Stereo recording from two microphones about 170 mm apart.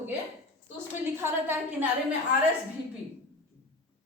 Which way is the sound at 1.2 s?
15° right (ahead or behind).